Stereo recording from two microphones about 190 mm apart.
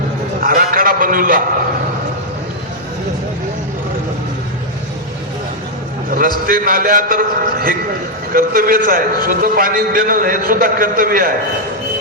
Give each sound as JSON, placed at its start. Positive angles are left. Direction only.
{"t": 0.3, "sound": "a man's voice", "side_deg": -45}
{"t": 6.1, "sound": "a man's voice", "side_deg": -50}